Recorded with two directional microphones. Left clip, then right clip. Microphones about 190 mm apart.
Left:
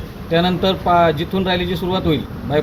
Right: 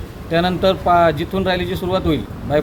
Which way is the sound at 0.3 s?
15° right (ahead or behind).